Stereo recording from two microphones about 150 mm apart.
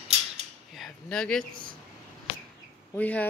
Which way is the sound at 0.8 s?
5° left (ahead or behind).